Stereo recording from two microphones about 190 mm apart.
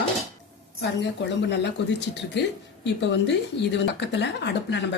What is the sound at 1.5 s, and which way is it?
Speech, 65° left (ahead or behind).